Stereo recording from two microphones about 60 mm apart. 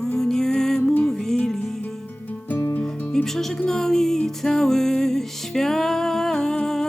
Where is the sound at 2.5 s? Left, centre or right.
Left.